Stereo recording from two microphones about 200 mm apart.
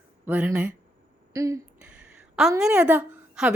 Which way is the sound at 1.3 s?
15° right (ahead or behind).